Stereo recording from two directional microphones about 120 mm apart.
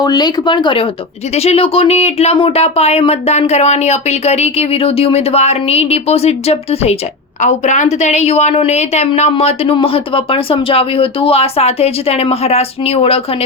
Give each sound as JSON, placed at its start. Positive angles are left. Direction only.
{"t": 0.0, "sound": "speech", "side_deg": 35}
{"t": 1.4, "sound": "speech", "side_deg": 55}
{"t": 7.4, "sound": "speech", "side_deg": 90}
{"t": 9.3, "sound": "speech", "side_deg": 55}